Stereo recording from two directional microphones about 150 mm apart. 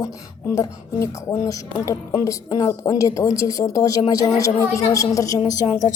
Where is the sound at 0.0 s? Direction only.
20° left (ahead or behind).